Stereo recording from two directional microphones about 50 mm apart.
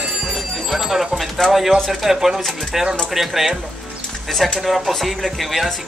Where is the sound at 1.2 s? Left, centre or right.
Centre.